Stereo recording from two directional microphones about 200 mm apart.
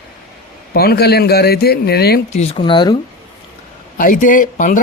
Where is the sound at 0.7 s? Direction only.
50° left (ahead or behind).